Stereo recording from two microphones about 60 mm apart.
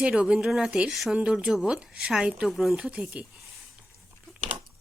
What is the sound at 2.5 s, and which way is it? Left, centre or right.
Speech, centre.